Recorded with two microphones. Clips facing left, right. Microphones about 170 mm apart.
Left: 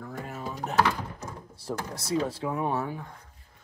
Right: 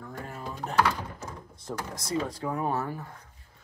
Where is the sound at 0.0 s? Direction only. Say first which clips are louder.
Left 2 dB; 5° left (ahead or behind).